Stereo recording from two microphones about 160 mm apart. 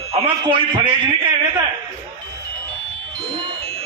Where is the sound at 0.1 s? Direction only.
30° right (ahead or behind).